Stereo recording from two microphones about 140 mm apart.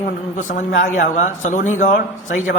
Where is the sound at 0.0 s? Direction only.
60° left (ahead or behind).